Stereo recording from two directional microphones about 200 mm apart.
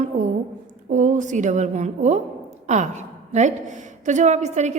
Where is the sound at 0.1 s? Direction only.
35° right (ahead or behind).